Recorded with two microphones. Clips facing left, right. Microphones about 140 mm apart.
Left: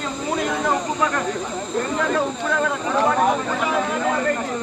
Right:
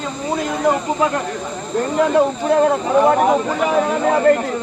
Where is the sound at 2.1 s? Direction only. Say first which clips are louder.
Right 7 dB; 35° right (ahead or behind).